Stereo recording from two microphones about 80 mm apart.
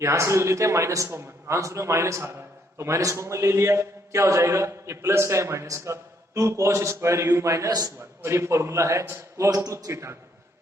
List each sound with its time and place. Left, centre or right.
0.0 s a man's voice: right
7.7 s a man's voice: right
8.2 s a man's voice: right